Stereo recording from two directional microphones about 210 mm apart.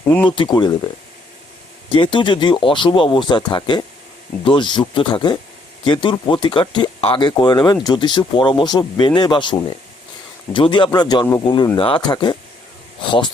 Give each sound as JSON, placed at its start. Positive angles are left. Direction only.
{"t": 0.3, "sound": "speech", "side_deg": 20}
{"t": 1.9, "sound": "speech", "side_deg": 25}